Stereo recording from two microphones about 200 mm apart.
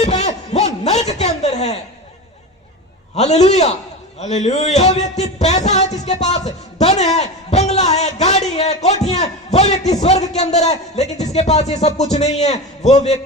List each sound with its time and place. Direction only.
0.0 s a sound: 35° left (ahead or behind)
1.4 s chuckle: 35° left (ahead or behind)
3.2 s a man's voice: 35° left (ahead or behind)